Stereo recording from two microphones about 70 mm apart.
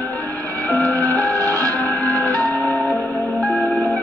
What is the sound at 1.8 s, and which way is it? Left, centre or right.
Music, left.